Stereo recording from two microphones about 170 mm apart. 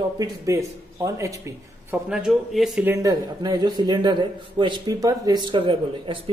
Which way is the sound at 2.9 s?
20° right (ahead or behind).